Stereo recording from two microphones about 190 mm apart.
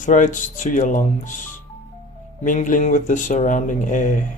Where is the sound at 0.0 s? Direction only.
40° left (ahead or behind).